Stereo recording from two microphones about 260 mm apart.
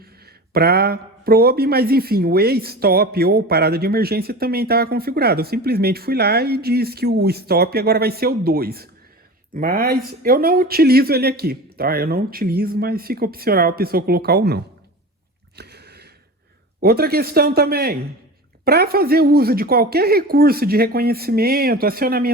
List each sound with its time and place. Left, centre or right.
0.0 s speech: right
15.5 s a sound: right
16.8 s speech: right